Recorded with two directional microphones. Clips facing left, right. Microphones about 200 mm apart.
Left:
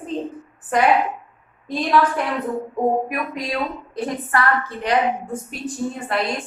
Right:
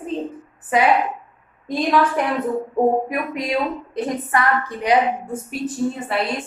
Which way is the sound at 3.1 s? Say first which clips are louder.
Right 3 dB; 25° right (ahead or behind).